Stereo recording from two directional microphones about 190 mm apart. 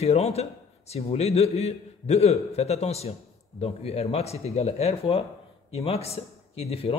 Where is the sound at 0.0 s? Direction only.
35° left (ahead or behind).